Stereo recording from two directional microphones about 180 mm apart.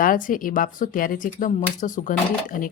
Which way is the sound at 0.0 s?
50° left (ahead or behind).